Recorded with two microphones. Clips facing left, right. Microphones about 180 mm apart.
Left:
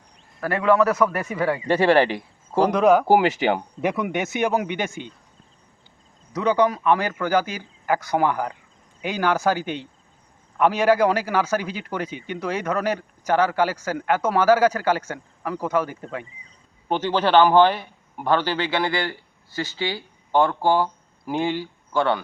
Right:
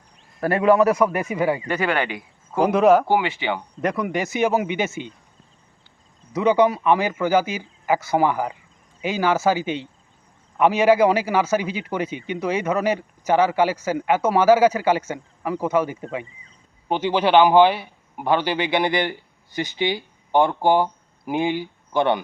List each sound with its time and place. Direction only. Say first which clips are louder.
0.3 s speech: right 2 dB; 25° right (ahead or behind)
1.6 s speech: left 6 dB; 30° left (ahead or behind)
2.6 s speech: right 1 dB; 5° right (ahead or behind)
3.1 s speech: left 4 dB; 40° left (ahead or behind)
3.8 s speech: even; 5° left (ahead or behind)
6.3 s speech: right 3 dB; 10° right (ahead or behind)